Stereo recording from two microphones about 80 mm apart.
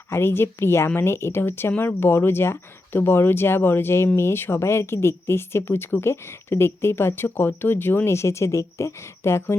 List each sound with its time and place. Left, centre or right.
0.1 s a woman's voice: left